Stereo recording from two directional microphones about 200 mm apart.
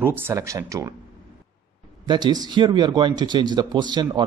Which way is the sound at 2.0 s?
20° right (ahead or behind).